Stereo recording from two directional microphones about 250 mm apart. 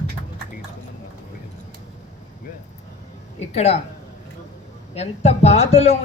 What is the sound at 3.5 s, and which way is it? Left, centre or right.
Speech, left.